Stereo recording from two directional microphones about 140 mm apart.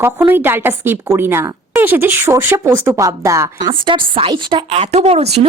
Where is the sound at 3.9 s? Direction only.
40° right (ahead or behind).